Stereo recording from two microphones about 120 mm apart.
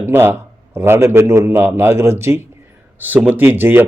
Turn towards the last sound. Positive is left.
turn(degrees=-15)  # may be behind; listen again after turning